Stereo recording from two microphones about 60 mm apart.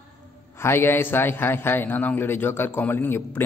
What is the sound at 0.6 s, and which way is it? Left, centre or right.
A man's voice, left.